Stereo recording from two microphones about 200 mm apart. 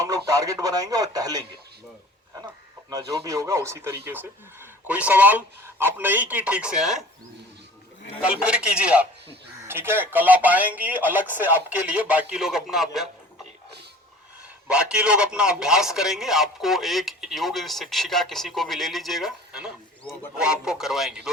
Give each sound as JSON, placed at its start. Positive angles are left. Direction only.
{"t": 0.3, "sound": "speech", "side_deg": -15}
{"t": 2.9, "sound": "a man's voice", "side_deg": -20}
{"t": 8.2, "sound": "a man's voice", "side_deg": -5}
{"t": 14.7, "sound": "a man's voice", "side_deg": -5}